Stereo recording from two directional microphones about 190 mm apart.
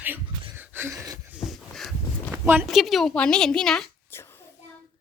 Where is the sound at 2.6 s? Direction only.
Centre (ahead or behind).